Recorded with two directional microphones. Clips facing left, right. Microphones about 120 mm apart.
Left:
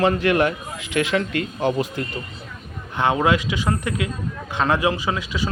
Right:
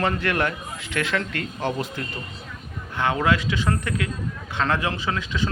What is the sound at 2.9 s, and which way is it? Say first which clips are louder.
A man's voice: left 3 dB; 20° left (ahead or behind).